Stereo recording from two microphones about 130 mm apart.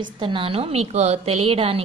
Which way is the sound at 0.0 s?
40° right (ahead or behind).